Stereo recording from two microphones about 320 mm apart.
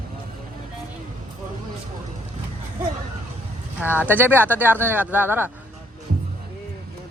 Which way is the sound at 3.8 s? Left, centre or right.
Centre.